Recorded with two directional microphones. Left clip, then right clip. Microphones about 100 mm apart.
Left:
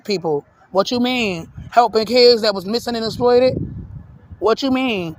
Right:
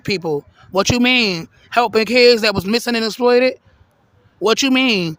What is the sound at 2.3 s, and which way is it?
Speech, 60° right (ahead or behind).